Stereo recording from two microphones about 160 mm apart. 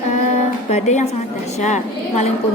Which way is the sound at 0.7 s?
45° left (ahead or behind).